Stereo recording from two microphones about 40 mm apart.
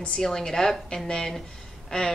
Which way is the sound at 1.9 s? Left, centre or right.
Centre.